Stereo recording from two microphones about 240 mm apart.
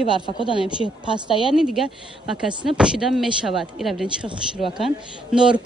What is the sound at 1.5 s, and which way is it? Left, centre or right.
Speech, centre.